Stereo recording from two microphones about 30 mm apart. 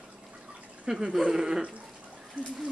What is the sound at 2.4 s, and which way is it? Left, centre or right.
Speech, right.